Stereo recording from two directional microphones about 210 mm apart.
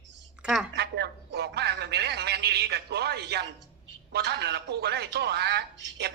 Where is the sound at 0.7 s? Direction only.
50° right (ahead or behind).